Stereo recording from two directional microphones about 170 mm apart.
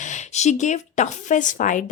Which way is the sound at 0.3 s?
45° left (ahead or behind).